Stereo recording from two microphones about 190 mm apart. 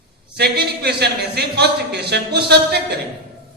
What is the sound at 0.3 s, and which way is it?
Speech, 60° right (ahead or behind).